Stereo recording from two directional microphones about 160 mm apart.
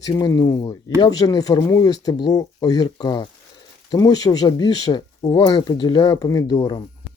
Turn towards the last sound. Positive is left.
turn(degrees=25)  # may be behind; listen again after turning